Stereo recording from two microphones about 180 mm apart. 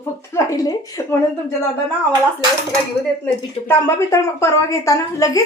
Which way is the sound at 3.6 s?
15° left (ahead or behind).